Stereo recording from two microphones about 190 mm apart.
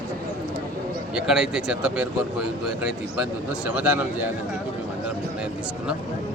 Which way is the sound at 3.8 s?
10° right (ahead or behind).